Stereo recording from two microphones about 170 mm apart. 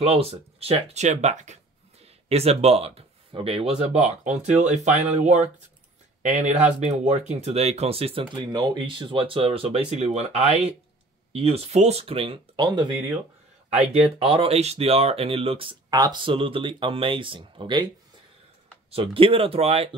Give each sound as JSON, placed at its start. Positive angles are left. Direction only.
{"t": 0.0, "sound": "speech", "side_deg": -35}
{"t": 14.2, "sound": "speech", "side_deg": -35}
{"t": 18.9, "sound": "speech", "side_deg": -35}